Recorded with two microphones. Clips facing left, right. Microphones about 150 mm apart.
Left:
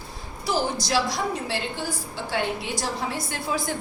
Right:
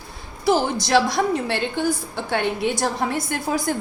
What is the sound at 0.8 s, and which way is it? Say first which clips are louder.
A woman's voice: right 6 dB; 60° right (ahead or behind).